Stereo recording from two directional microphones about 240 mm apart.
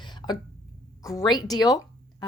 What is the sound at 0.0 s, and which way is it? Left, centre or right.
Cough, centre.